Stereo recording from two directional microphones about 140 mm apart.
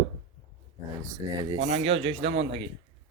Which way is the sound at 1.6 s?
50° right (ahead or behind).